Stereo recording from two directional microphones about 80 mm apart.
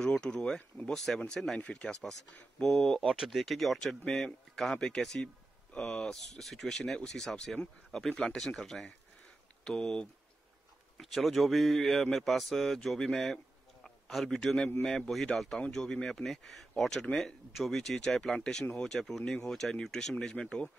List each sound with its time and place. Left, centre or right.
0.0 s a man's voice: centre